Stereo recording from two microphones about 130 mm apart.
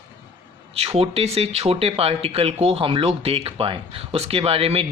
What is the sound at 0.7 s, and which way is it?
Speech, 50° right (ahead or behind).